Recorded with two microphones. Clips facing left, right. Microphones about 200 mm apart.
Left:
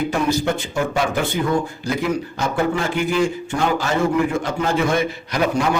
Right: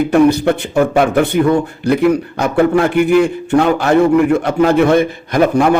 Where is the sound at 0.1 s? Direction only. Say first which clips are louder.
Right 9 dB; 60° right (ahead or behind).